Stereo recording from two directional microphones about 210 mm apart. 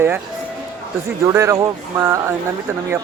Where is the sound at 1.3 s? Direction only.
15° right (ahead or behind).